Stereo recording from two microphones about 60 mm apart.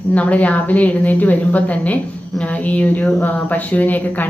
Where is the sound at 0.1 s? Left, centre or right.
Left.